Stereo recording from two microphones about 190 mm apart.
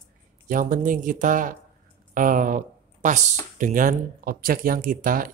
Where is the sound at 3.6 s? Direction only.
45° right (ahead or behind).